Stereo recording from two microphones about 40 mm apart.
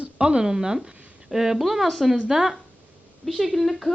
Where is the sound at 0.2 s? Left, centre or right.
Right; by 1.9 s centre.